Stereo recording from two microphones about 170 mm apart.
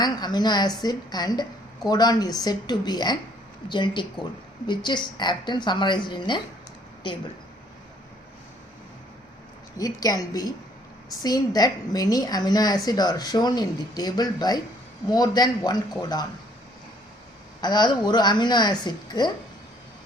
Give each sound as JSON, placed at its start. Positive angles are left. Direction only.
{"t": 0.0, "sound": "a woman's voice", "side_deg": 25}
{"t": 9.7, "sound": "a woman's voice", "side_deg": 20}
{"t": 17.6, "sound": "a woman's voice", "side_deg": 25}